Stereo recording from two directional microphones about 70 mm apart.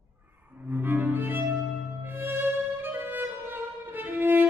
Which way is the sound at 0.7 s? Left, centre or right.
Right.